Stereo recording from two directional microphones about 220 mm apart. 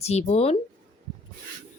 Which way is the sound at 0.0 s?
30° left (ahead or behind).